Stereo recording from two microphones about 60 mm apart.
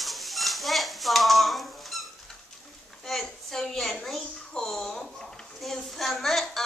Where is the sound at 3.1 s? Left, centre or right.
Centre.